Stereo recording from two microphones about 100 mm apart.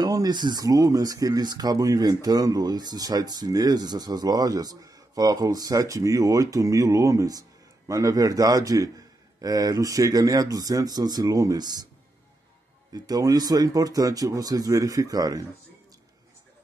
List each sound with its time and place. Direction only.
0.0 s speech: 40° right (ahead or behind)
12.9 s speech: 40° right (ahead or behind)